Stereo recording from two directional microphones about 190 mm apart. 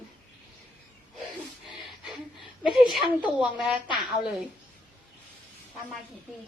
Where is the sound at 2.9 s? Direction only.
5° right (ahead or behind).